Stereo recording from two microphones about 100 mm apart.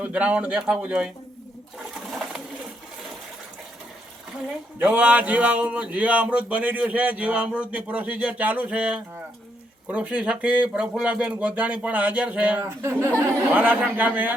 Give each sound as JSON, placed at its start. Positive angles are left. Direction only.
{"t": 0.0, "sound": "speech", "side_deg": -15}
{"t": 1.9, "sound": "pigeon", "side_deg": -5}
{"t": 4.8, "sound": "speech", "side_deg": -15}
{"t": 12.6, "sound": "speech", "side_deg": -25}
{"t": 13.5, "sound": "speech", "side_deg": -15}